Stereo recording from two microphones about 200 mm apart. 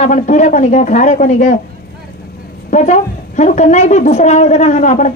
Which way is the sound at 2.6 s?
35° left (ahead or behind).